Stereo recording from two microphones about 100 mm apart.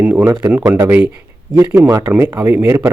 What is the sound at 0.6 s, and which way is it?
Speech, 45° right (ahead or behind).